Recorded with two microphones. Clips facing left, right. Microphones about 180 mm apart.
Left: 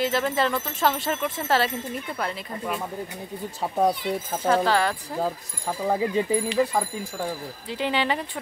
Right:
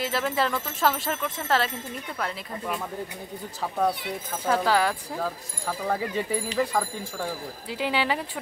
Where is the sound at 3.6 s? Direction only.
20° left (ahead or behind).